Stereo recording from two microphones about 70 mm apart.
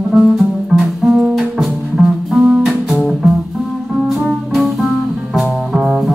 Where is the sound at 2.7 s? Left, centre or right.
Centre.